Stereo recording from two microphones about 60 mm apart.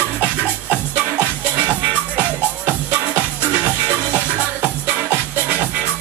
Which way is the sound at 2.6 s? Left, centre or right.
Right.